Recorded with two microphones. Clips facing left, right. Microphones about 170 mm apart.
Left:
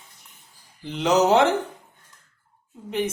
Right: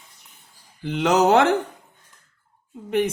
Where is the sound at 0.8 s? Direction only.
60° right (ahead or behind).